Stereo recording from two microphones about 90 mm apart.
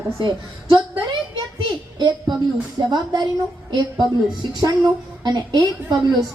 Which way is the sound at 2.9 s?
50° right (ahead or behind).